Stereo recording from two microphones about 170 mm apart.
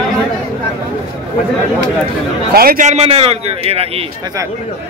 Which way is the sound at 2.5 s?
60° right (ahead or behind).